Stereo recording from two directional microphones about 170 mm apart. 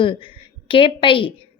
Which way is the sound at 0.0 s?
30° left (ahead or behind).